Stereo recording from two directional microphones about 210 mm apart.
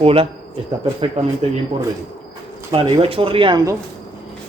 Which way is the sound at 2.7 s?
25° right (ahead or behind).